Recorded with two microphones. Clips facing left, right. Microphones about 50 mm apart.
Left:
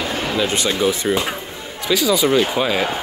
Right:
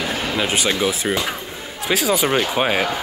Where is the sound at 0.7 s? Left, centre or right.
Right.